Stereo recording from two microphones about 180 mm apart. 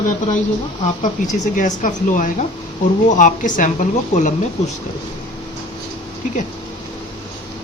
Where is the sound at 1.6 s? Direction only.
45° left (ahead or behind).